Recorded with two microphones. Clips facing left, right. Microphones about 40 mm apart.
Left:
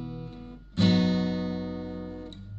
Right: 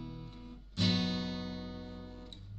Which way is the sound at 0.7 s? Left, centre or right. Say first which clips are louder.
Left 9 dB; left.